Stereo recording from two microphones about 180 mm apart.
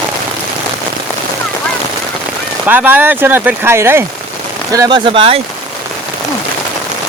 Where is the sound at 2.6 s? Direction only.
10° right (ahead or behind); by 5.4 s 30° right (ahead or behind).